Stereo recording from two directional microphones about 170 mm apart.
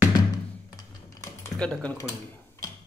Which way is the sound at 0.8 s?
20° left (ahead or behind).